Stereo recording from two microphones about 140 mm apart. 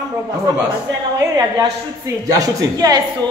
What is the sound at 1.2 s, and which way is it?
A woman's voice, 25° right (ahead or behind).